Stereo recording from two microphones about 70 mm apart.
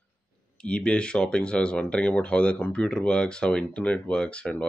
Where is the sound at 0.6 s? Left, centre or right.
Centre.